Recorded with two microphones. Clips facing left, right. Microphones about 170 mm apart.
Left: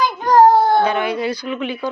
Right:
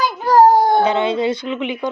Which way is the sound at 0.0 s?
5° right (ahead or behind).